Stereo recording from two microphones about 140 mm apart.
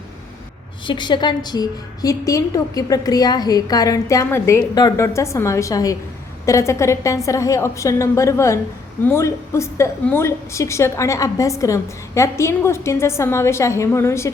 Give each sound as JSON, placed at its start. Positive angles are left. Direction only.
{"t": 0.9, "sound": "a woman's voice", "side_deg": 35}